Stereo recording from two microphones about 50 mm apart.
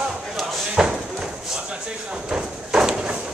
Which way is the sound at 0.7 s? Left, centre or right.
Centre.